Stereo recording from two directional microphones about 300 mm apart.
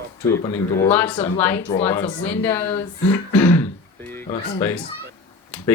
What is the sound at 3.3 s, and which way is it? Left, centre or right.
Throat clearing, centre.